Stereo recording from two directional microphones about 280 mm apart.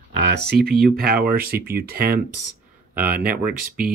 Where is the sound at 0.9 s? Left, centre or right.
Right.